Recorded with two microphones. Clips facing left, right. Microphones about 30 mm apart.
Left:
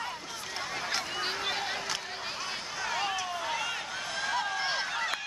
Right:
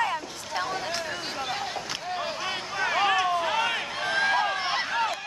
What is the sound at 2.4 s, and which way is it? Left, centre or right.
Vehicle, right.